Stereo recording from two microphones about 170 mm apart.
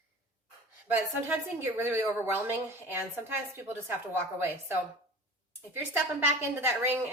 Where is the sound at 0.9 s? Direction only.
10° right (ahead or behind).